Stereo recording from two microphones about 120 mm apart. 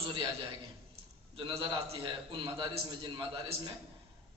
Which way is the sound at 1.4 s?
45° right (ahead or behind).